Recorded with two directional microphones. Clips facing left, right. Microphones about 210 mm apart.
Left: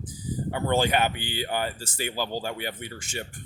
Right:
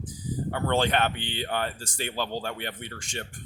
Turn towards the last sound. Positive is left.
turn(degrees=5)  # may be behind; listen again after turning